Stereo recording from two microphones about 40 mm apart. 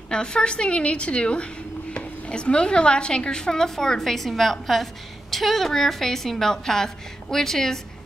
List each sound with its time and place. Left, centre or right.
0.1 s a woman's voice: left